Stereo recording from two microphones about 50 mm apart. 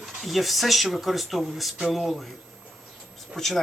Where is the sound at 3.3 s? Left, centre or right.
Centre.